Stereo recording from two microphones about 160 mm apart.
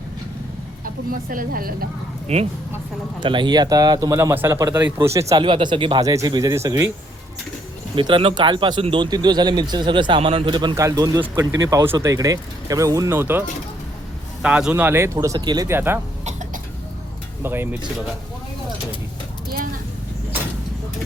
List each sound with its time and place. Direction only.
1.1 s a woman's voice: 60° right (ahead or behind)
2.2 s speech: 45° right (ahead or behind)
3.2 s speech: 30° right (ahead or behind)
5.3 s speech: 30° right (ahead or behind)
7.9 s speech: 30° right (ahead or behind); by 13.4 s 15° right (ahead or behind)
14.4 s speech: 5° right (ahead or behind)
16.2 s cough: 50° right (ahead or behind)
17.4 s speech: 15° right (ahead or behind)